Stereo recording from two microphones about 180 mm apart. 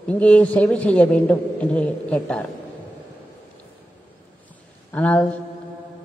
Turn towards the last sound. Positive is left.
turn(degrees=10)  # may be behind; listen again after turning